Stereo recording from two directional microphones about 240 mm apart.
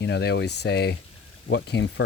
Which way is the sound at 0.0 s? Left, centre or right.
Left.